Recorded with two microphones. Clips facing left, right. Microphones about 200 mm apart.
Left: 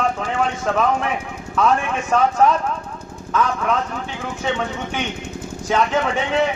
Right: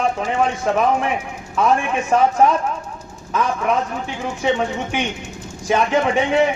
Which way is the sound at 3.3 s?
15° right (ahead or behind).